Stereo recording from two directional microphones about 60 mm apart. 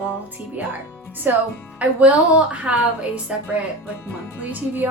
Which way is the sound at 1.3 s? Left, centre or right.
Right.